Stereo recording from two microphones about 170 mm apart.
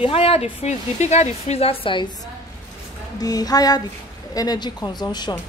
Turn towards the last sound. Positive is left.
turn(degrees=20)  # may be behind; listen again after turning